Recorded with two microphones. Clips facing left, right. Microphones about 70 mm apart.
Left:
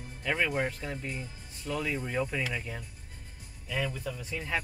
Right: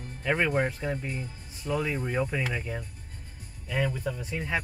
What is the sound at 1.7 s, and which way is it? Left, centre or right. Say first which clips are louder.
Speech: right 3 dB; centre.